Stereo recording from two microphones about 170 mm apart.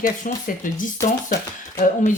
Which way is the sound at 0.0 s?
50° left (ahead or behind).